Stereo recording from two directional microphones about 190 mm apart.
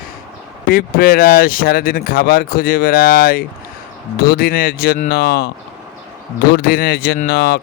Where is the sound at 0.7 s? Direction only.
50° left (ahead or behind).